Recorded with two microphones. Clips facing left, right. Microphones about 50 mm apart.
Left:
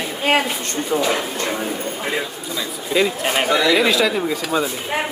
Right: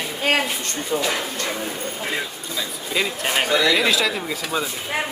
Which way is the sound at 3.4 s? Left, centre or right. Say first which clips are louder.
Left 3 dB; centre.